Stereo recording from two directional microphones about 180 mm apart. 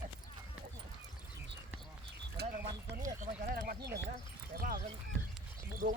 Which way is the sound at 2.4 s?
60° right (ahead or behind).